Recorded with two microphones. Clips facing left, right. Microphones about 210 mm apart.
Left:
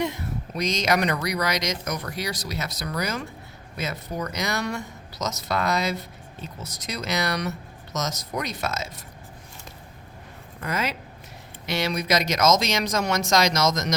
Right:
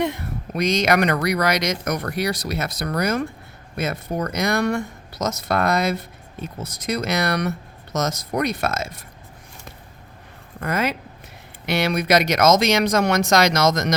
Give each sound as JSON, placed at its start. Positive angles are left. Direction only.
{"t": 0.0, "sound": "speech", "side_deg": -55}
{"t": 10.6, "sound": "speech", "side_deg": -55}